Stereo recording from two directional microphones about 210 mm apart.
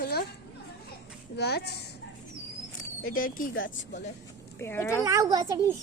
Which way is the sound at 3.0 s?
40° left (ahead or behind).